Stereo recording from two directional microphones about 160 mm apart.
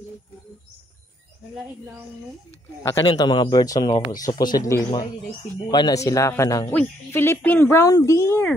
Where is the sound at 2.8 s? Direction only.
20° left (ahead or behind).